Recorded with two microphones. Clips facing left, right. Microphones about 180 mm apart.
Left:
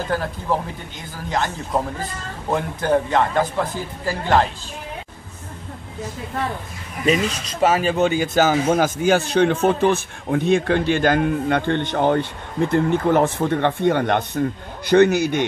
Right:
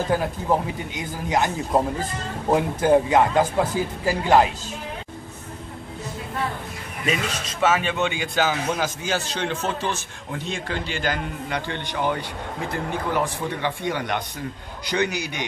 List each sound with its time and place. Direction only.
0.1 s speech: 15° right (ahead or behind)
7.6 s a man's voice: 35° left (ahead or behind)